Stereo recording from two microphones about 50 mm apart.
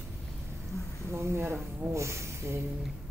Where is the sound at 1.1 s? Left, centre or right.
Right.